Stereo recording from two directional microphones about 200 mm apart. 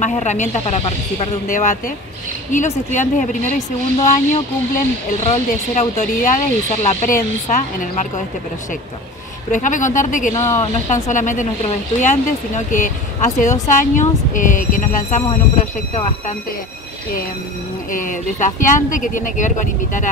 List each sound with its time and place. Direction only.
0.0 s speech: 35° left (ahead or behind)
9.5 s speech: 40° left (ahead or behind)
10.3 s speech: 15° left (ahead or behind)
10.6 s speech: 35° left (ahead or behind)
17.9 s speech: 40° left (ahead or behind)